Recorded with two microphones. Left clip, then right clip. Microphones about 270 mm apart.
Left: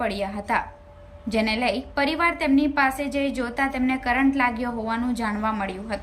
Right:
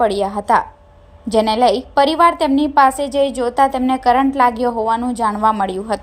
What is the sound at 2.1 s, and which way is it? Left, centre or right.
A woman's voice, right.